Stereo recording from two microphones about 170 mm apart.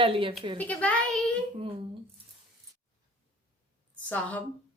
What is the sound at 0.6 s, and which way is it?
Speech, 10° left (ahead or behind).